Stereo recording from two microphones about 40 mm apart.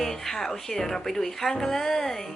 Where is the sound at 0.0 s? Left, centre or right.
Centre.